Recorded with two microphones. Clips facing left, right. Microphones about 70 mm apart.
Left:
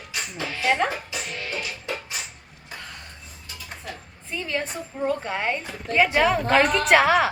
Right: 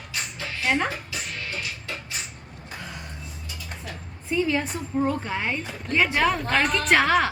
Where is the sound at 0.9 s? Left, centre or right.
Left.